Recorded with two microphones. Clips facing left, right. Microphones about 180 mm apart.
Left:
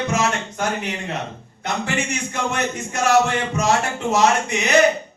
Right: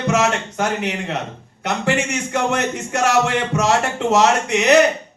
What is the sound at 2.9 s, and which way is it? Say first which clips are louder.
Speech: even; 75° right (ahead or behind).